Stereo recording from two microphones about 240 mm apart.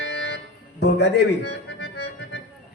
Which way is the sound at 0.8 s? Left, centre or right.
Left.